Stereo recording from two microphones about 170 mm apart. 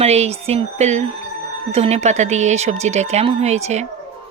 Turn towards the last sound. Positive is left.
turn(degrees=-40)  # may be behind; listen again after turning